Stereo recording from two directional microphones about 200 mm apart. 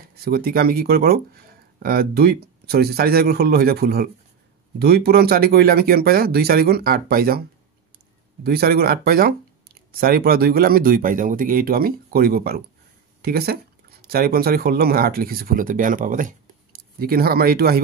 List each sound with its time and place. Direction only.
0.1 s speech: 50° right (ahead or behind)
8.5 s speech: 50° right (ahead or behind)